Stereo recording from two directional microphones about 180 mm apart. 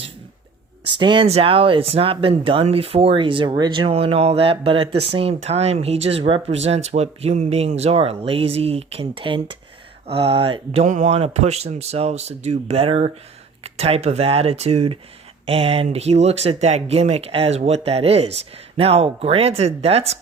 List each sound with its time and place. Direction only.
0.9 s speech: 25° right (ahead or behind)